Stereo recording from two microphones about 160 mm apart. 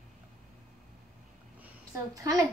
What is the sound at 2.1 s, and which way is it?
Speech, 20° right (ahead or behind).